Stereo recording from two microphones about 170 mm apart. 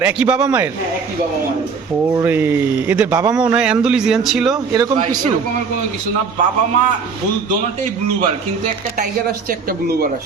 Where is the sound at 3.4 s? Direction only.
5° right (ahead or behind).